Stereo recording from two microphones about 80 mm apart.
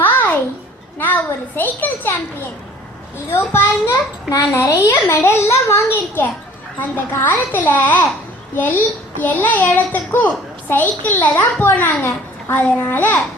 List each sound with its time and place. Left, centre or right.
0.0 s a sound: left
0.9 s a child's voice: left
3.2 s a child's voice: left